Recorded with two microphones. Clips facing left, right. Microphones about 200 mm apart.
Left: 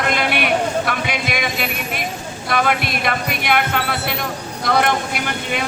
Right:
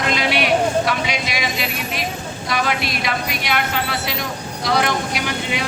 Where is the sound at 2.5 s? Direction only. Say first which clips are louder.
Left 3 dB; 55° left (ahead or behind).